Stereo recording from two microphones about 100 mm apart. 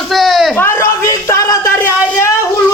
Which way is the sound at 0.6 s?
25° left (ahead or behind).